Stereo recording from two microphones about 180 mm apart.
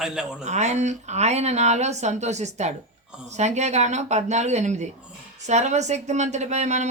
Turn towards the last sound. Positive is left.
turn(degrees=-40)  # may be behind; listen again after turning